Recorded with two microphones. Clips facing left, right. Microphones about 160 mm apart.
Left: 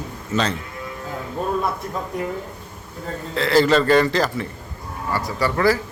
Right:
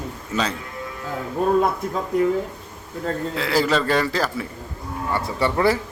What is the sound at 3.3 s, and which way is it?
A man's voice, 5° right (ahead or behind).